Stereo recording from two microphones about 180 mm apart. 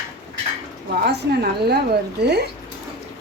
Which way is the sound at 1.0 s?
65° right (ahead or behind).